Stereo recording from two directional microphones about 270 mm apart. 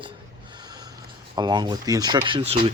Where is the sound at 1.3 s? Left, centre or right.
Centre.